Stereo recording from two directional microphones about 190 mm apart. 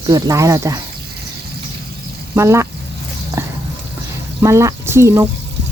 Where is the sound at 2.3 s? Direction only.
15° right (ahead or behind).